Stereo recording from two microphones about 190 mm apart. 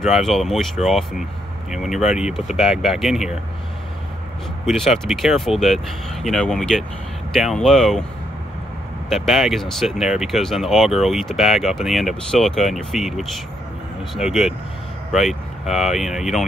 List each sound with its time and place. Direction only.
0.0 s speech: centre (ahead or behind)
4.6 s speech: centre (ahead or behind)
9.1 s speech: centre (ahead or behind)